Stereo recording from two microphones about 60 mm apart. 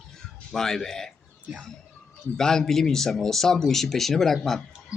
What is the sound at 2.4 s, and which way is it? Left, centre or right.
Speech, centre.